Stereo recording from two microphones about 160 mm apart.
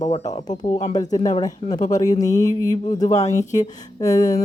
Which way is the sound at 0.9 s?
25° left (ahead or behind).